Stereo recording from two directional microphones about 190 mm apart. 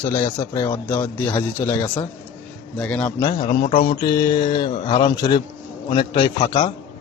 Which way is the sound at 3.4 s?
25° left (ahead or behind).